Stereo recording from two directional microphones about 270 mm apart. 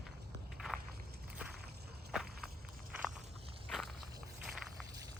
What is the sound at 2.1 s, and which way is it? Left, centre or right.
Walk, centre.